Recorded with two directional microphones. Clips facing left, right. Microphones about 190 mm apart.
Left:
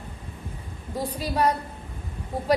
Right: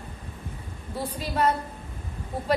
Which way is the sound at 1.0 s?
10° left (ahead or behind).